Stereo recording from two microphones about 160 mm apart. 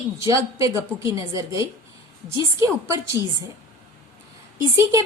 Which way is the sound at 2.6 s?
20° right (ahead or behind).